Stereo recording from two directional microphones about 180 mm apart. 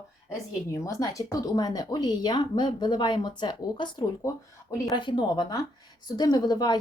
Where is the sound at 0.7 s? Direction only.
20° left (ahead or behind).